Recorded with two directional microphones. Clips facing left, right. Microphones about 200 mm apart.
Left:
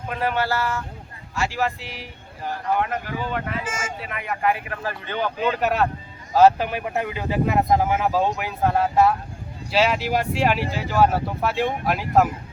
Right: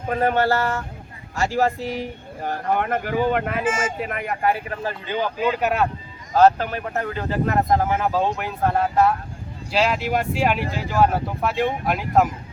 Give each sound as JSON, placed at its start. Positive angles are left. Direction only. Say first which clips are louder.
{"t": 0.1, "sound": "speech", "louder": "right 5 dB", "side_deg": -45}
{"t": 4.8, "sound": "speech", "louder": "right 2 dB", "side_deg": -20}